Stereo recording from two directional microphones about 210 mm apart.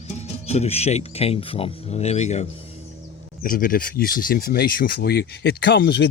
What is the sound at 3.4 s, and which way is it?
Speech, 40° left (ahead or behind).